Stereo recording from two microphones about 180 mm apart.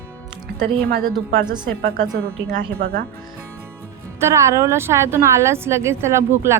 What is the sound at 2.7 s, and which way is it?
Speech, 60° right (ahead or behind).